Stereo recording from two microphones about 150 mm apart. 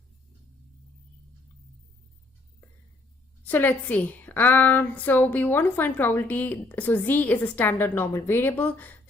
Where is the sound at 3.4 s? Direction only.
10° left (ahead or behind).